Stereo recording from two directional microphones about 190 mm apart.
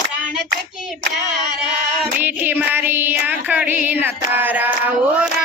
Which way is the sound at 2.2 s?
10° right (ahead or behind).